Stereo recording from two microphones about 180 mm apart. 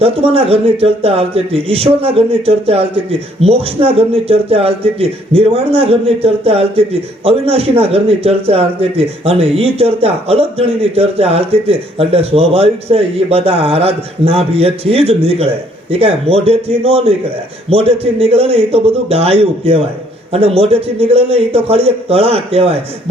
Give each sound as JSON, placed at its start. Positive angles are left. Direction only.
{"t": 0.0, "sound": "a man's voice", "side_deg": -35}